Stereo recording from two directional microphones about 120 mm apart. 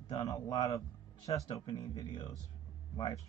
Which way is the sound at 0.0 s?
30° left (ahead or behind).